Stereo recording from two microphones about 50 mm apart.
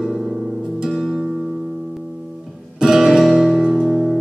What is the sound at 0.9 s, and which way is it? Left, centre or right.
Music, centre.